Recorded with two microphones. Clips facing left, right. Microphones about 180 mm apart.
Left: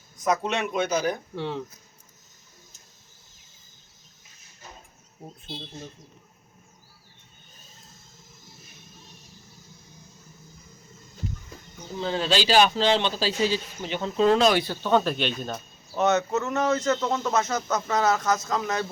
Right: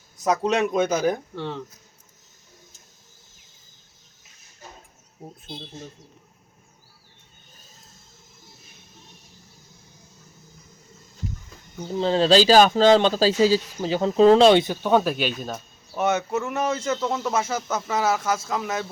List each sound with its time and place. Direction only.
0.3 s speech: 40° right (ahead or behind)
1.4 s speech: 5° left (ahead or behind)
11.9 s speech: 30° right (ahead or behind); by 18.9 s 5° right (ahead or behind)